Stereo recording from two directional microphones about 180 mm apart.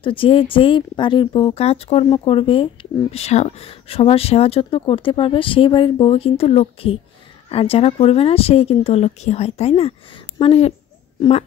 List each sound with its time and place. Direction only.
0.0 s speech: 30° left (ahead or behind)